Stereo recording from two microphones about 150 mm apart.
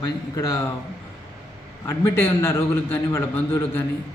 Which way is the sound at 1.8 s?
15° left (ahead or behind).